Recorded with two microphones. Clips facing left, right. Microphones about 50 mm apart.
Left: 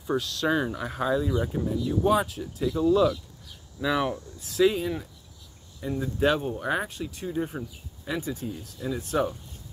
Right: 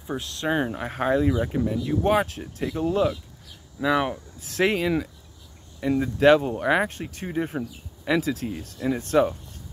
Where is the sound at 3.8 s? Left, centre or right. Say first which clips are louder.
Right 3 dB; centre.